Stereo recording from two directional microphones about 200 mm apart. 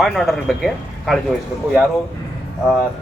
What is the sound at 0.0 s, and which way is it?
Speech, centre (ahead or behind).